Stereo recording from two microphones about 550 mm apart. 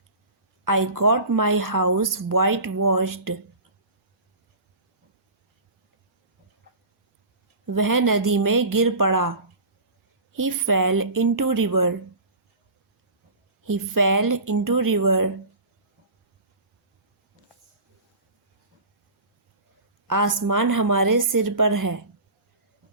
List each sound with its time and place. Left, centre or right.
0.6 s speech: right
7.7 s speech: right
10.3 s speech: right
13.7 s speech: right
20.1 s speech: right